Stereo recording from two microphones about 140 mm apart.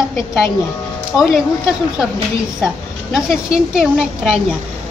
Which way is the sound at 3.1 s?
5° right (ahead or behind).